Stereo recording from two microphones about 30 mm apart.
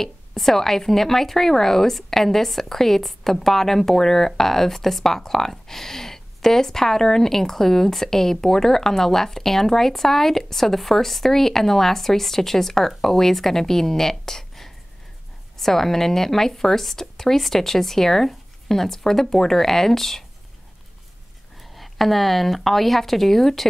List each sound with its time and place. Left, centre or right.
0.0 s speech: centre
21.5 s speech: centre